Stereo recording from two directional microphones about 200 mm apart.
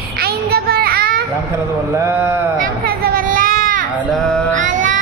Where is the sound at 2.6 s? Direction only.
50° right (ahead or behind).